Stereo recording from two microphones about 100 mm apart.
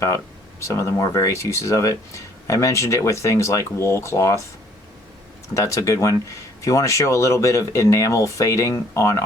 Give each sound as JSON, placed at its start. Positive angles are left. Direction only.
{"t": 0.6, "sound": "speech", "side_deg": 30}
{"t": 5.5, "sound": "speech", "side_deg": 30}